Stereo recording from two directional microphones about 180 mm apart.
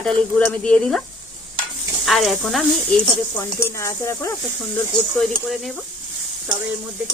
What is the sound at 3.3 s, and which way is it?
Stir, 15° left (ahead or behind).